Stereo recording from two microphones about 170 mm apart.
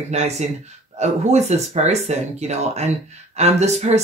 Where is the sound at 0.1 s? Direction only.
40° right (ahead or behind).